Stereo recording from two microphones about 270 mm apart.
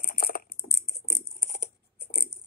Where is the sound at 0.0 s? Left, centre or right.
Left.